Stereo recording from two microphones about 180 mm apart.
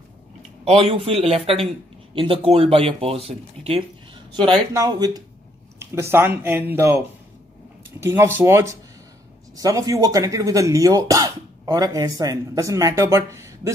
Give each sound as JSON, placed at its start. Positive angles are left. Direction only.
{"t": 0.7, "sound": "speech", "side_deg": -30}